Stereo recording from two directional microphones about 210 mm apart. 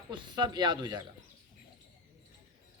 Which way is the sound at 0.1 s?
20° right (ahead or behind).